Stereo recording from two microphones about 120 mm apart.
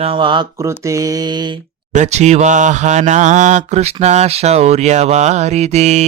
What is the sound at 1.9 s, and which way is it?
Mantra, 70° right (ahead or behind).